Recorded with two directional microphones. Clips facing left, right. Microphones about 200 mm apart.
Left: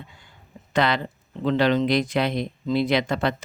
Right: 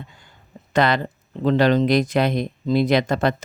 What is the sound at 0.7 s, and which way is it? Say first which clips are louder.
Speech: right 3 dB; 45° right (ahead or behind).